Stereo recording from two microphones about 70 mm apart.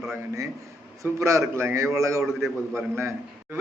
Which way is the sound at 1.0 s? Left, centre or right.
Right.